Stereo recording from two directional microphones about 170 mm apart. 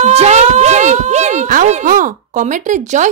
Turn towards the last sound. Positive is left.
turn(degrees=-45)  # may be behind; listen again after turning